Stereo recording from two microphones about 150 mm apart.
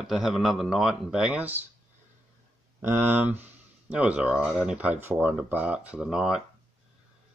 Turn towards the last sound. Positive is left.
turn(degrees=-5)  # may be behind; listen again after turning